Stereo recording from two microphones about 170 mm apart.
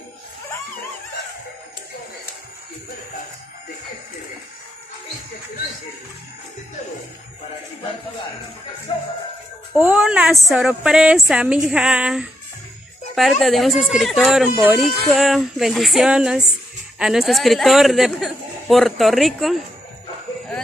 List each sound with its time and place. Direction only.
8.9 s music: 30° left (ahead or behind)
9.8 s speech: 5° right (ahead or behind)